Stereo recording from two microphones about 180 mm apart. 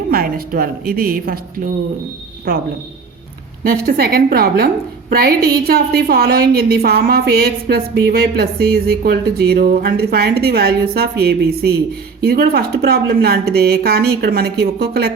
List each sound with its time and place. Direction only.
0.1 s a woman's voice: 55° right (ahead or behind)
3.6 s a woman's voice: 55° right (ahead or behind)